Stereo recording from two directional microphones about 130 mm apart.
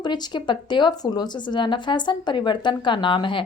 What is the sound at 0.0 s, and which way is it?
A woman's voice, 35° left (ahead or behind).